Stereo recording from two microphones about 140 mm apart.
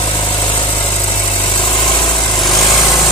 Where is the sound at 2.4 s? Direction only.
Centre (ahead or behind).